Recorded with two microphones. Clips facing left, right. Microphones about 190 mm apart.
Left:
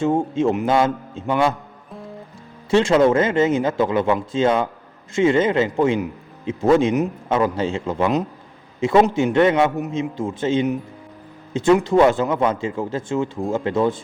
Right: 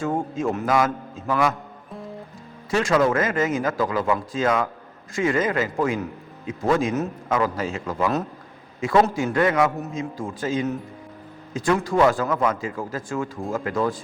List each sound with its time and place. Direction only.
0.0 s speech: 25° left (ahead or behind)
2.6 s speech: 25° left (ahead or behind)